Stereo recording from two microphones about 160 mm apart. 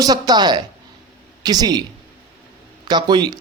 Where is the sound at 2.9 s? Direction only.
25° right (ahead or behind).